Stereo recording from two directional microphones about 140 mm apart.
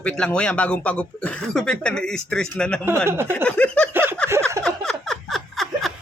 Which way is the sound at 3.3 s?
10° left (ahead or behind).